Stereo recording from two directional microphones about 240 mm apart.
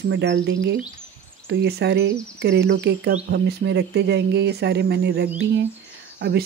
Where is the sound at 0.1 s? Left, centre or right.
Right.